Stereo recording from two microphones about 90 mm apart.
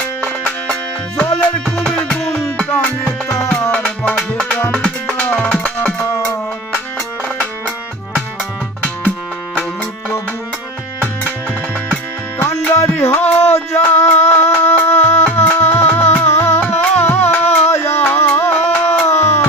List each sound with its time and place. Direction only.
1.7 s music: 10° left (ahead or behind)
2.6 s music: 20° left (ahead or behind)
6.1 s music: 30° left (ahead or behind)
12.4 s music: 30° left (ahead or behind)